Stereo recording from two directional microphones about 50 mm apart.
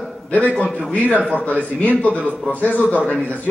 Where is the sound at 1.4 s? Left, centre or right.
Left.